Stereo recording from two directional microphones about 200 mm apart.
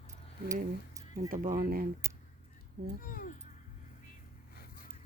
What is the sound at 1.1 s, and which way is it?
Speech, 45° right (ahead or behind).